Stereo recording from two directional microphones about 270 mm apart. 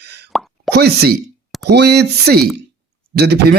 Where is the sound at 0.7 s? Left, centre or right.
Right.